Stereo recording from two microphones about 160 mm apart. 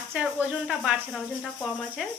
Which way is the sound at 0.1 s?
10° right (ahead or behind).